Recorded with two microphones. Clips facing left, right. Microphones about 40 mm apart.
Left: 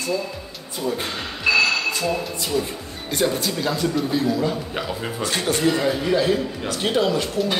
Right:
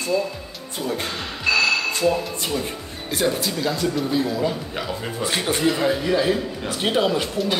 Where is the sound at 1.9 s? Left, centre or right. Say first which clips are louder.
Right 2 dB; right.